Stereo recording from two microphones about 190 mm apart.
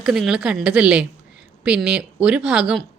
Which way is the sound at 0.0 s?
5° right (ahead or behind).